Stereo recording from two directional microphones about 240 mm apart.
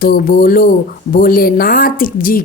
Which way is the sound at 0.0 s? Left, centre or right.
Left.